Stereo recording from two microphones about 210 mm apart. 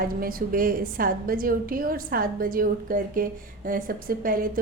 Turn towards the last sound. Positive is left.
turn(degrees=-40)  # may be behind; listen again after turning